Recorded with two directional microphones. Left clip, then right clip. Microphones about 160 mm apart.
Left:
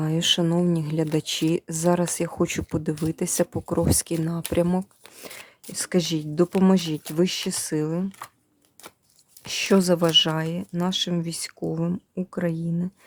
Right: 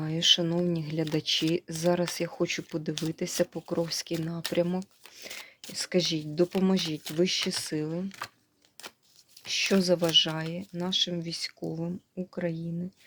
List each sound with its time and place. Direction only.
0.0 s speech: 30° left (ahead or behind)
9.6 s speech: 40° left (ahead or behind)